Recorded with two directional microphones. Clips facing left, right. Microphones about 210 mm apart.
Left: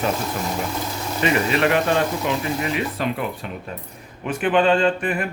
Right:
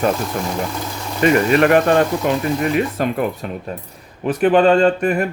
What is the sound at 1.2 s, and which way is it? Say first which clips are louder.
Speech: right 6 dB; 50° right (ahead or behind).